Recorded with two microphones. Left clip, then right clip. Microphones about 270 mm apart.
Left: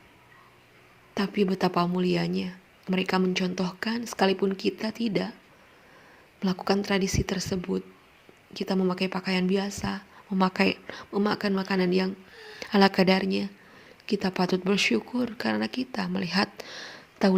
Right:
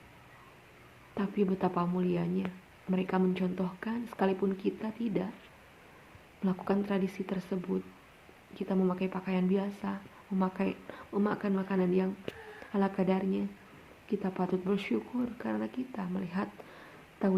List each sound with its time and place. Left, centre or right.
1.1 s speech: left
6.4 s speech: left